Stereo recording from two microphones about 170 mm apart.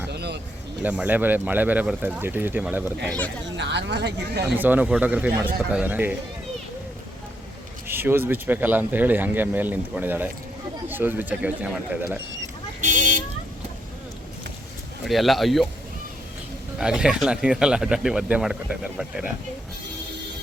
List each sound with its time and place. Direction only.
0.1 s a sound: 80° right
0.8 s speech: 10° right (ahead or behind)
3.6 s a woman's voice: 90° right
4.5 s speech: 10° right (ahead or behind)
7.9 s speech: 10° right (ahead or behind)
12.8 s vehicle: 50° right (ahead or behind)
15.0 s speech: centre (ahead or behind)
16.7 s speech: 5° right (ahead or behind)